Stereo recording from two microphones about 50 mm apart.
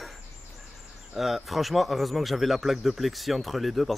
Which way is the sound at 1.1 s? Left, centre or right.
Centre.